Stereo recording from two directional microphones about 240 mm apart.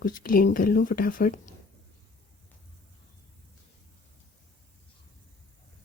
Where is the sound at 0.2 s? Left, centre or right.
Left.